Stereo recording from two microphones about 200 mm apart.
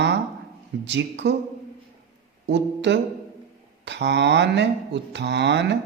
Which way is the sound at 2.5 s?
60° right (ahead or behind).